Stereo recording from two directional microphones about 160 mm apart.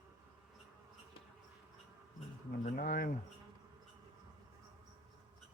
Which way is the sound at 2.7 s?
60° left (ahead or behind).